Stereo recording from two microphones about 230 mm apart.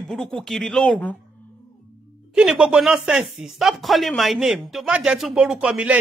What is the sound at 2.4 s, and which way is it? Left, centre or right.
Speech, centre.